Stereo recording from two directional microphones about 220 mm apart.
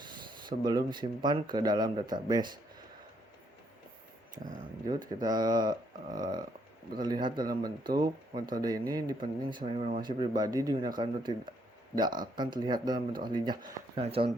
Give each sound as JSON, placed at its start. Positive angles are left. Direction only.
{"t": 0.0, "sound": "speech", "side_deg": -20}
{"t": 4.9, "sound": "speech", "side_deg": -20}